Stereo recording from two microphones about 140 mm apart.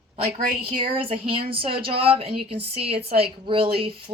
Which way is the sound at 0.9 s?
40° right (ahead or behind).